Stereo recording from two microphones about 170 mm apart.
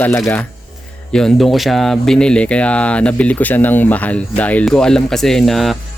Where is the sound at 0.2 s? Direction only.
15° left (ahead or behind).